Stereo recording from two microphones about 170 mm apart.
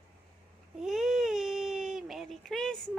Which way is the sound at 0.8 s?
Centre (ahead or behind).